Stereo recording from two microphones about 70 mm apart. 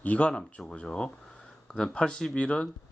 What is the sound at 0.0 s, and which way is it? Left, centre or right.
Speech, centre.